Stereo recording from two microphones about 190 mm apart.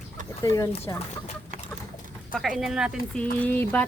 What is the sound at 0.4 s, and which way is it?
Speech, 15° left (ahead or behind).